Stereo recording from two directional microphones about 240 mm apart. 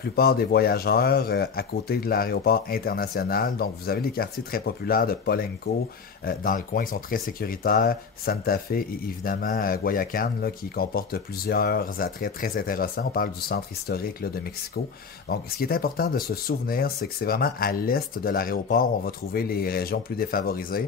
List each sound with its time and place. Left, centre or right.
0.1 s speech: left